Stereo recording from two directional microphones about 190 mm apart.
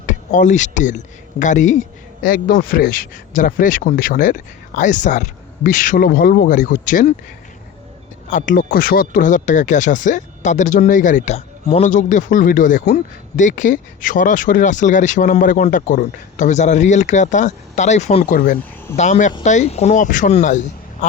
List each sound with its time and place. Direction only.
0.0 s speech: 40° left (ahead or behind)
8.3 s speech: 45° left (ahead or behind)
18.3 s speech: 50° left (ahead or behind)
18.9 s speech: 40° left (ahead or behind)